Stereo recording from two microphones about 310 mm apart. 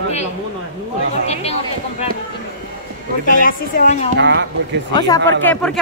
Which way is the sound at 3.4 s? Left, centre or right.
Left.